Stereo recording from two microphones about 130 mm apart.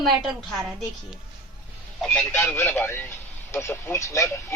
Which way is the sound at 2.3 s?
20° left (ahead or behind).